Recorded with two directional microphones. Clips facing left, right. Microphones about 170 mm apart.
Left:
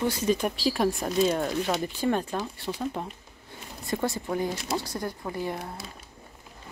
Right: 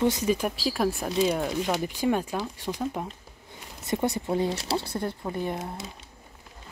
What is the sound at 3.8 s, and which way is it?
Speech, 20° right (ahead or behind).